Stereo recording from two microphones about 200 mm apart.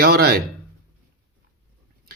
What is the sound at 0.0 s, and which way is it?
Speech, 50° right (ahead or behind).